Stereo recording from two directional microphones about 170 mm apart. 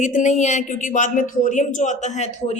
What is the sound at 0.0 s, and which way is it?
A woman's voice, 45° left (ahead or behind).